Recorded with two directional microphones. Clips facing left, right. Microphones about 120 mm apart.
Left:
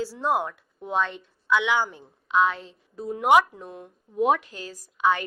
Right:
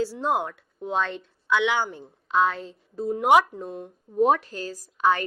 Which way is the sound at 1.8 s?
35° right (ahead or behind).